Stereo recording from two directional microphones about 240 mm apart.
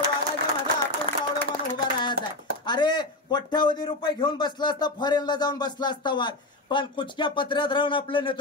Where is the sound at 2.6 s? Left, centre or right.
Centre.